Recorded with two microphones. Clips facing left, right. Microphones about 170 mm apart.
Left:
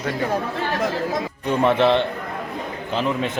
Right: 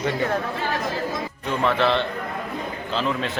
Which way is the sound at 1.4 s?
20° left (ahead or behind).